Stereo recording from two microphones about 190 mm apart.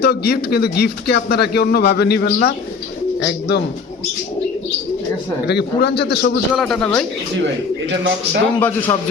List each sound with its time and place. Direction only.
0.0 s speech: 55° left (ahead or behind)
5.5 s speech: 60° left (ahead or behind)
6.5 s a man's voice: centre (ahead or behind)
7.9 s a man's voice: 65° right (ahead or behind)
8.9 s a man's voice: 20° left (ahead or behind)